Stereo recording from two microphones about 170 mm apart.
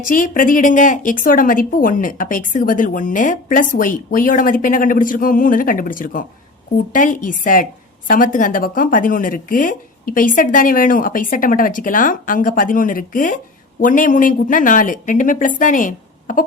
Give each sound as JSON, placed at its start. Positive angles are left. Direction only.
{"t": 0.1, "sound": "a woman's voice", "side_deg": 55}